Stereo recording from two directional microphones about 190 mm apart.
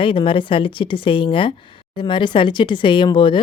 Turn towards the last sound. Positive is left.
turn(degrees=25)  # may be behind; listen again after turning